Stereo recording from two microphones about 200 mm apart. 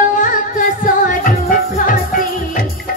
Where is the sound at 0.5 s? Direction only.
40° left (ahead or behind).